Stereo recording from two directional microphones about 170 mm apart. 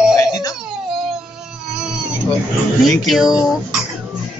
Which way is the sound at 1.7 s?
5° right (ahead or behind).